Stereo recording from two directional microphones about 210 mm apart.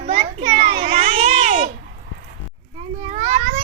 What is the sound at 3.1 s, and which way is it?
Children playing, 35° right (ahead or behind).